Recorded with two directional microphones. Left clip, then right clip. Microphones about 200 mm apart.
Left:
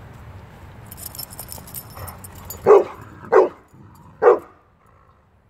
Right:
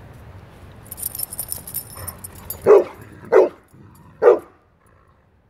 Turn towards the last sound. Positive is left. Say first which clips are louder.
# right 1 dB
turn(degrees=-5)  # may be behind; listen again after turning